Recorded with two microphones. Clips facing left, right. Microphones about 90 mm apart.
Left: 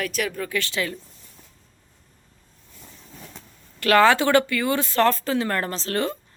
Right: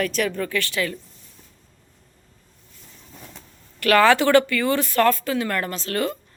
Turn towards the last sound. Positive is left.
turn(degrees=30)  # may be behind; listen again after turning